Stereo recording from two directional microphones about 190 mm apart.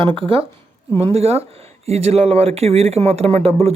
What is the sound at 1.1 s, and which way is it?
Speech, 35° right (ahead or behind).